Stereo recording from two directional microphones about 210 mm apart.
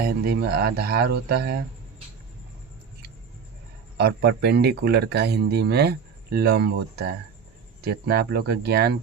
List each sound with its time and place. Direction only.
0.0 s speech: 45° right (ahead or behind)
3.9 s speech: 50° right (ahead or behind)